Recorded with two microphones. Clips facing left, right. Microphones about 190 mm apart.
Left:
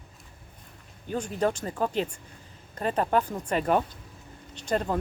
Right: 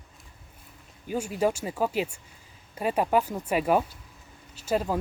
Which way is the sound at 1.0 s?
10° right (ahead or behind).